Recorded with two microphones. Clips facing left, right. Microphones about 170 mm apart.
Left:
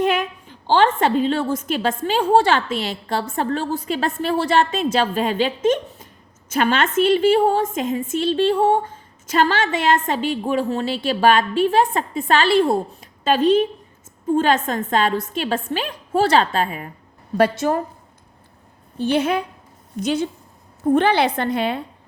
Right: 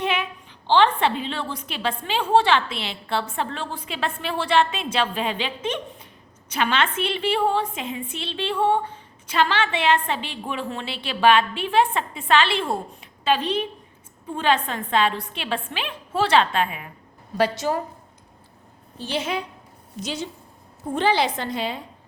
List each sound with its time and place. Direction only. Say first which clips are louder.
0.0 s a woman's voice: left 6 dB; 45° left (ahead or behind)
17.3 s a woman's voice: left 4 dB; 55° left (ahead or behind)
18.9 s a woman's voice: left 8 dB; 55° left (ahead or behind)